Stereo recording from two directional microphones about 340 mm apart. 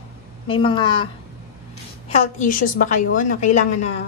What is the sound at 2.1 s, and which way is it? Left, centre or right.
A woman's voice, left.